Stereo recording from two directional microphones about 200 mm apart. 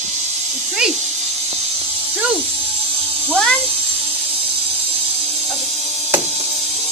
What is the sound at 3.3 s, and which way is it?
Speech, 5° left (ahead or behind).